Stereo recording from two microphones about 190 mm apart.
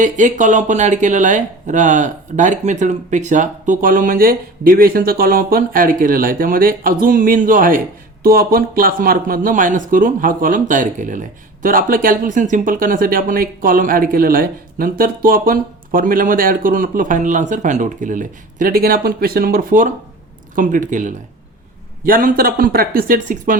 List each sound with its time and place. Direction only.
0.0 s speech: 40° right (ahead or behind)